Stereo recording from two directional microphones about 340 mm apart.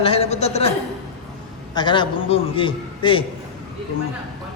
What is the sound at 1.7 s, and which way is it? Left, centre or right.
A man's voice, centre.